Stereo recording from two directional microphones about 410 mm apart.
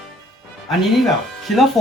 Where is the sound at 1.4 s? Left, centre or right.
Centre.